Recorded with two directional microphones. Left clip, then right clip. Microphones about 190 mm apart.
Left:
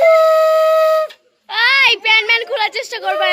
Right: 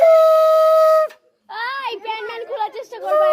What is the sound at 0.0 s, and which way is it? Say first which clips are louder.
Wind instrument: left 1 dB; 50° right (ahead or behind).